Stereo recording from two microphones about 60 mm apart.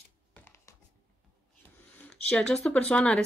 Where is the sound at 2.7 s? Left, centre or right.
Left.